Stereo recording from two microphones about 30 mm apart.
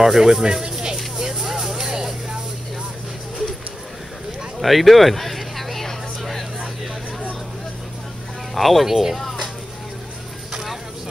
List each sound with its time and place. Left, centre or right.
0.0 s speech: centre
1.1 s a sound: right
4.6 s a sound: centre
8.5 s speech: centre
8.8 s speech: centre
9.1 s music: centre